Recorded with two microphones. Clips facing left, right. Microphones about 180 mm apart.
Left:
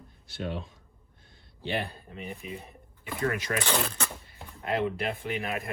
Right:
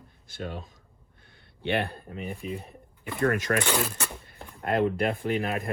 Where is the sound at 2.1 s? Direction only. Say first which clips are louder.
Right 4 dB; 35° right (ahead or behind).